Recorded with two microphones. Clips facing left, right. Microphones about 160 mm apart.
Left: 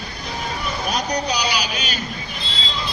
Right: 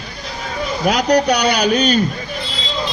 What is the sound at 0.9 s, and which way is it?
A man's voice, 80° right.